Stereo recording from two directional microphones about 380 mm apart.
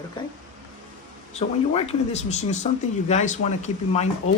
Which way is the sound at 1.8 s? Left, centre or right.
Centre.